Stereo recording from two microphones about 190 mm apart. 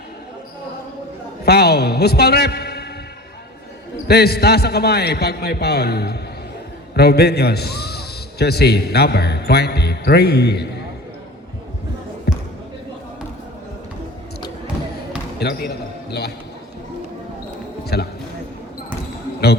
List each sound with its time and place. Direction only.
1.5 s a man's voice: 55° left (ahead or behind)
4.1 s a man's voice: 55° left (ahead or behind)
12.3 s basketball bounce: 55° left (ahead or behind)
15.4 s speech: 60° left (ahead or behind)
17.9 s a man's voice: 60° left (ahead or behind)